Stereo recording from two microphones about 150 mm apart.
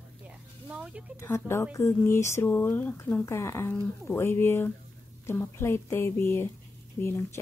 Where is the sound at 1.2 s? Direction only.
15° left (ahead or behind).